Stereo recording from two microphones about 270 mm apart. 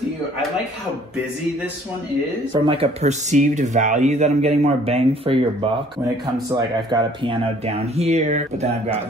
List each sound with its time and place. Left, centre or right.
2.6 s speech: right
6.9 s speech: right